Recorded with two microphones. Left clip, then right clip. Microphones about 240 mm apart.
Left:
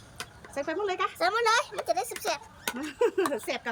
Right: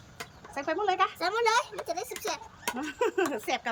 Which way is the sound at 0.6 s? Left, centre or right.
Centre.